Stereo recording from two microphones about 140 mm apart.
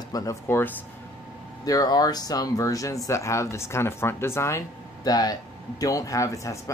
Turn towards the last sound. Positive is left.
turn(degrees=20)  # may be behind; listen again after turning